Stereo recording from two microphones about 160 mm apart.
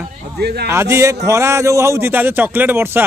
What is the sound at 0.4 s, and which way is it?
Speech, 90° right.